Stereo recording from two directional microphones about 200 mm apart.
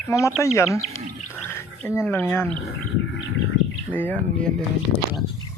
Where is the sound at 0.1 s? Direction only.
15° left (ahead or behind).